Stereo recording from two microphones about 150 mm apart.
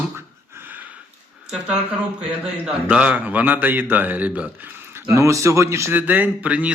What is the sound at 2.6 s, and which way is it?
A man's voice, 10° right (ahead or behind).